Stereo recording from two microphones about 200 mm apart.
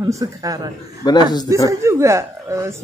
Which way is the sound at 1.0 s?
20° left (ahead or behind).